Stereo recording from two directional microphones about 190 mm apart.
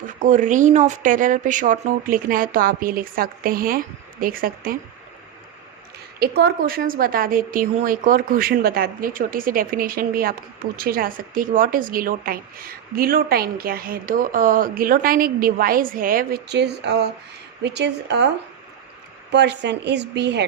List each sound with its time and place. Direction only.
0.2 s speech: 40° right (ahead or behind)
6.1 s a woman's voice: 55° right (ahead or behind)
19.3 s a woman's voice: 65° right (ahead or behind)